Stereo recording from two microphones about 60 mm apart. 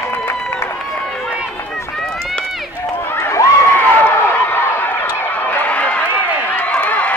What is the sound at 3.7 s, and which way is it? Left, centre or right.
Run, left.